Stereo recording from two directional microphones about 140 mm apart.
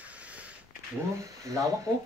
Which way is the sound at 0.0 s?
10° right (ahead or behind).